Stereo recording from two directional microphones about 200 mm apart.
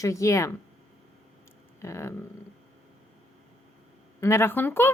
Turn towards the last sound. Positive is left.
turn(degrees=10)  # may be behind; listen again after turning